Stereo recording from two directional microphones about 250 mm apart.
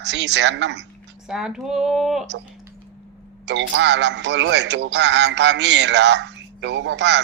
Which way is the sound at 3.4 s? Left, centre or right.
Right.